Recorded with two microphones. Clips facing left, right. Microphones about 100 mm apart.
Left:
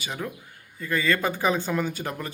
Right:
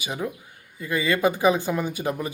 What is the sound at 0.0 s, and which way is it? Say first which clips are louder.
Speech: right 3 dB; 15° right (ahead or behind).